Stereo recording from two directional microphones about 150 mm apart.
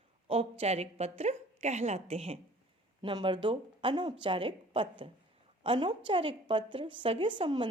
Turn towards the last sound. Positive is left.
turn(degrees=-35)  # may be behind; listen again after turning